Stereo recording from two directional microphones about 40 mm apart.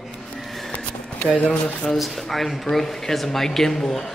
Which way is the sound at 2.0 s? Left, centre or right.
Centre.